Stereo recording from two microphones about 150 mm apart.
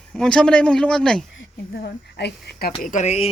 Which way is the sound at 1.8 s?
90° left.